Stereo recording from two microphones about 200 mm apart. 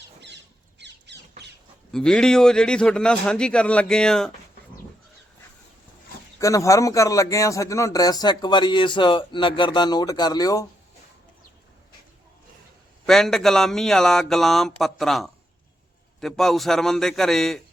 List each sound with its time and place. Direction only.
0.8 s squawk: 60° right (ahead or behind)
1.9 s speech: 5° left (ahead or behind)
6.4 s speech: 15° left (ahead or behind)
13.1 s speech: centre (ahead or behind)